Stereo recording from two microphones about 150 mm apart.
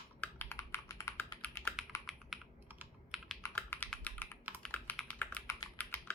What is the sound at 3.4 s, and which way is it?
Computer keyboard, 15° left (ahead or behind).